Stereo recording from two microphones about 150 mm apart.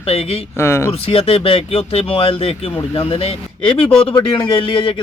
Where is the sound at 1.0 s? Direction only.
40° left (ahead or behind).